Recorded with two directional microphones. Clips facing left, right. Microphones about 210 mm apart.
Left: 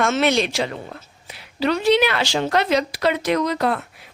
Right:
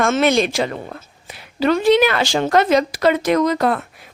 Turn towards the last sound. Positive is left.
turn(degrees=-45)  # may be behind; listen again after turning